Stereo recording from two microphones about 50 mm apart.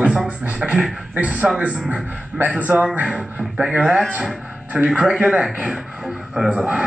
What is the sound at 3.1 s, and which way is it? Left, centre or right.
Speech, centre.